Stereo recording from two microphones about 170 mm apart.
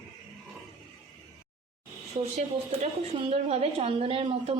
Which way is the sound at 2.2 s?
40° right (ahead or behind).